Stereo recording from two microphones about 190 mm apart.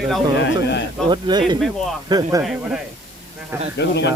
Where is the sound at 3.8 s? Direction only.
65° left (ahead or behind).